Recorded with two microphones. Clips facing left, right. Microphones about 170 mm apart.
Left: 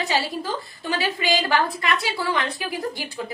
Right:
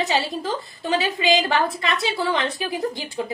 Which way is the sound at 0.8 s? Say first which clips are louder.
Right 4 dB; 20° right (ahead or behind).